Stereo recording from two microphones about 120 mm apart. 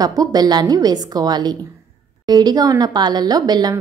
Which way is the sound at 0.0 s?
30° right (ahead or behind).